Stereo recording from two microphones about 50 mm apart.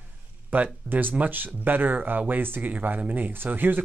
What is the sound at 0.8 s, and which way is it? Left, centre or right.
Speech, right.